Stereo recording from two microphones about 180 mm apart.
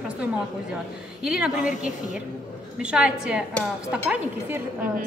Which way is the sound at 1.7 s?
45° left (ahead or behind).